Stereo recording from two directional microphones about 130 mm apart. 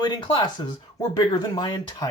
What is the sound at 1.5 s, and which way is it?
Speech, 35° left (ahead or behind).